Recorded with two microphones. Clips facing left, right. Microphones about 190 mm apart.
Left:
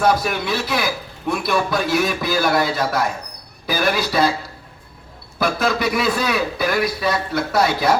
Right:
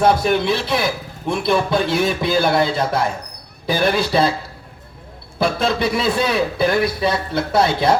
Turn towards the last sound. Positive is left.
turn(degrees=-25)  # may be behind; listen again after turning